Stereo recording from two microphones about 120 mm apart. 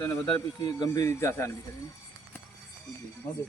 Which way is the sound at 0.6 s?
35° left (ahead or behind).